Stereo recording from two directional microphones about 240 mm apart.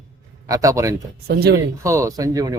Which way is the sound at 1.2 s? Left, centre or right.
Right.